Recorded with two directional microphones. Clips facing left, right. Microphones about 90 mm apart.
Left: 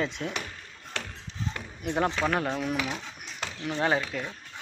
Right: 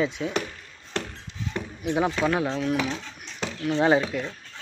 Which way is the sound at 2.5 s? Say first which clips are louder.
Right 4 dB; 10° left (ahead or behind).